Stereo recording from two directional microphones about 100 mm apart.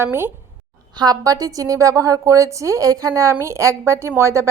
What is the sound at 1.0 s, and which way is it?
A woman's voice, 40° right (ahead or behind).